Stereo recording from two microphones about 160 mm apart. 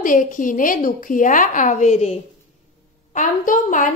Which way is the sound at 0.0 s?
55° left (ahead or behind).